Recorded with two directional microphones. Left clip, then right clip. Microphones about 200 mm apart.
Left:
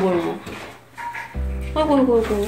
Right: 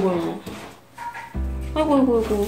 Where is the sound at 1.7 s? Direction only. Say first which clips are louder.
Left 2 dB; 10° right (ahead or behind).